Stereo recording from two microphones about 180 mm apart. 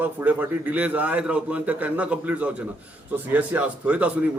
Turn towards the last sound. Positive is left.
turn(degrees=-5)  # may be behind; listen again after turning